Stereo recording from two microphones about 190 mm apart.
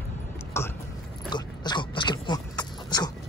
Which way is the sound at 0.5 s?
15° left (ahead or behind).